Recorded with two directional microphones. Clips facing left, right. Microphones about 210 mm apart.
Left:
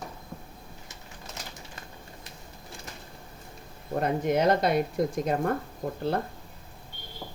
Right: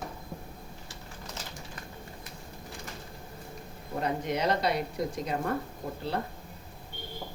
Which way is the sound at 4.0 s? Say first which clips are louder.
Left 5 dB; 50° left (ahead or behind).